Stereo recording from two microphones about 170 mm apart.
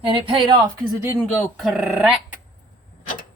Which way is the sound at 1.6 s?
Centre (ahead or behind).